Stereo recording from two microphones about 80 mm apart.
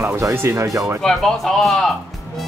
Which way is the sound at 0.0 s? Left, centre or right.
Right.